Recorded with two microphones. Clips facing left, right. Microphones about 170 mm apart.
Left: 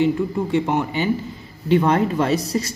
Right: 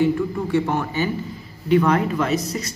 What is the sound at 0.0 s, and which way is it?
Speech, 20° left (ahead or behind).